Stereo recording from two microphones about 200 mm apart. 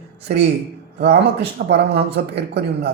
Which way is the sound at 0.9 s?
55° right (ahead or behind).